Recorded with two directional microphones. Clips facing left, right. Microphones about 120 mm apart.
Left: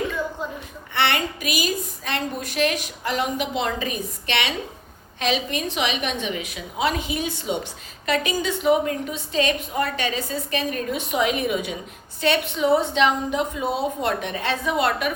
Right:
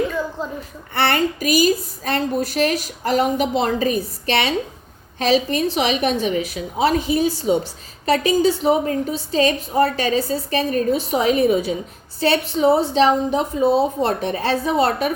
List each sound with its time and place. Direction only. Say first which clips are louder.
0.9 s a woman's voice: right 4 dB; 40° right (ahead or behind)